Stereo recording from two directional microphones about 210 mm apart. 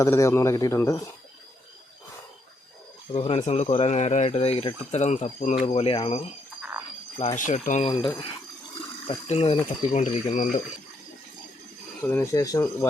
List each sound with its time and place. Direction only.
0.0 s speech: 15° left (ahead or behind)
3.1 s speech: 30° left (ahead or behind)
6.6 s frog: 10° right (ahead or behind)
7.2 s speech: 35° left (ahead or behind)
7.9 s speech: 20° left (ahead or behind)
12.0 s speech: 10° left (ahead or behind)